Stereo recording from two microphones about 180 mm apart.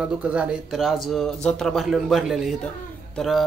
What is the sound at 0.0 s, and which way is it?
Speech, 5° right (ahead or behind).